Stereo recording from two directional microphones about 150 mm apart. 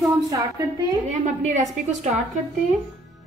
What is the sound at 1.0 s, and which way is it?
A woman's voice, 50° right (ahead or behind).